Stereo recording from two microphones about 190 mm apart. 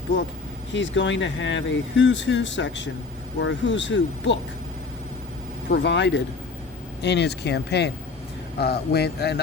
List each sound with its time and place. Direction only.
0.1 s speech: 70° left (ahead or behind)
5.7 s speech: 70° left (ahead or behind)